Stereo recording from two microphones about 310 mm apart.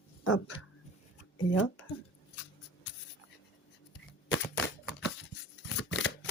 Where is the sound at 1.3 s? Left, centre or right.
Left.